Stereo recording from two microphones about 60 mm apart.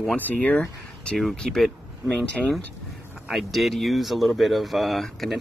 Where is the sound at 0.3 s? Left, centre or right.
Left.